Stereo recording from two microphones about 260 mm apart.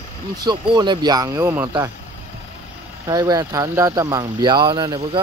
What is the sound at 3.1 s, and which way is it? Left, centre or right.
Speech, centre.